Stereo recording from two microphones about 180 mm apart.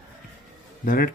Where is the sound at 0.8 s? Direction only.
55° left (ahead or behind).